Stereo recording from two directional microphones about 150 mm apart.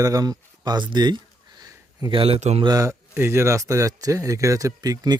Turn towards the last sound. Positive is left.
turn(degrees=-25)  # may be behind; listen again after turning